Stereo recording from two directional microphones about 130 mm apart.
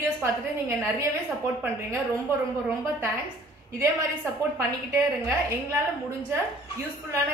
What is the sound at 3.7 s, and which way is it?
A woman's voice, 25° right (ahead or behind).